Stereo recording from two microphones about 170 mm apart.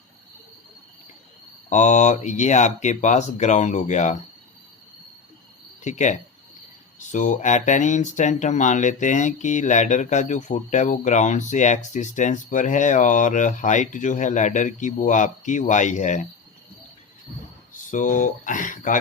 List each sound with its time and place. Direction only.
1.7 s speech: 45° left (ahead or behind)
5.8 s speech: 45° left (ahead or behind)
17.9 s speech: 50° left (ahead or behind)